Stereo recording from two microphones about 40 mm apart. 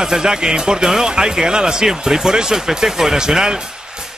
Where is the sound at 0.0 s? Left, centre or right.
Centre.